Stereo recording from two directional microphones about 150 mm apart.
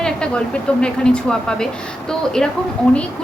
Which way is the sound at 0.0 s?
5° left (ahead or behind).